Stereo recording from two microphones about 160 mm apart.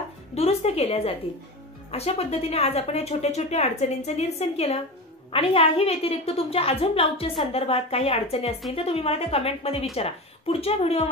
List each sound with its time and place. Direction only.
0.3 s a woman's voice: 40° left (ahead or behind)